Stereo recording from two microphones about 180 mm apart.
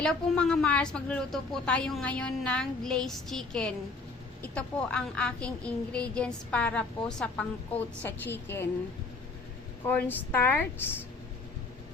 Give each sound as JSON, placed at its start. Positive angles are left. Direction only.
{"t": 0.0, "sound": "a woman's voice", "side_deg": 5}
{"t": 9.8, "sound": "a woman's voice", "side_deg": 10}